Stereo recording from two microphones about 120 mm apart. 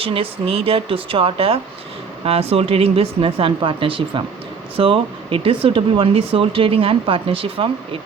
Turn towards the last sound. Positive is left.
turn(degrees=-50)  # may be behind; listen again after turning